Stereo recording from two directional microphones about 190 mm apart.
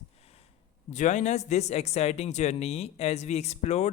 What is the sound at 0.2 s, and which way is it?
A man's voice, 35° left (ahead or behind).